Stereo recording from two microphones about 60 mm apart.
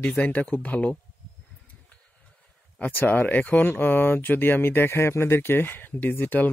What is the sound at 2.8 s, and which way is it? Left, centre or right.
Speech, left.